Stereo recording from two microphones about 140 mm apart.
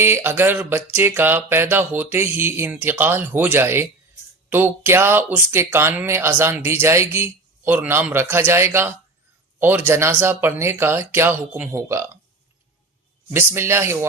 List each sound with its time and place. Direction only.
0.0 s speech: 15° right (ahead or behind)
13.3 s speech: 15° right (ahead or behind)